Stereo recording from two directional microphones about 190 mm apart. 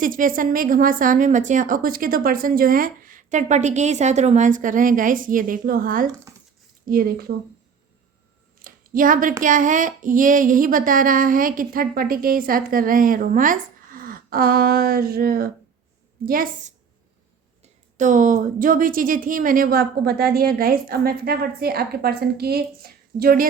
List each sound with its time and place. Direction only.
0.0 s a woman's voice: 45° right (ahead or behind)
8.5 s a sound: 45° right (ahead or behind)
9.4 s a woman's voice: 45° right (ahead or behind)